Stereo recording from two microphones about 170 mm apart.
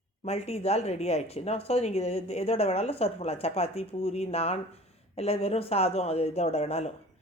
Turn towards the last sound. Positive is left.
turn(degrees=40)  # may be behind; listen again after turning